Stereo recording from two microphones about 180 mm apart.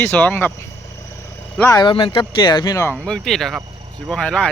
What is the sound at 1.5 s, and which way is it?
Speech, 20° left (ahead or behind).